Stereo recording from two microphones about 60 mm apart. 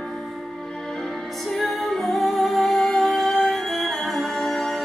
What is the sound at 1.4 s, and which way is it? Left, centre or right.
Music, centre.